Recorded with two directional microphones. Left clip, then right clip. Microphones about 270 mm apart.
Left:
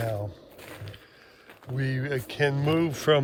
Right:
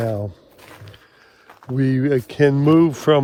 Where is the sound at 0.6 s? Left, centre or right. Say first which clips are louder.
Right 1 dB; centre.